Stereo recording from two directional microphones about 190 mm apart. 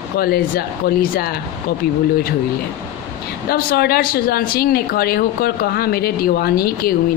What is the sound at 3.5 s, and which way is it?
Speech, 55° left (ahead or behind).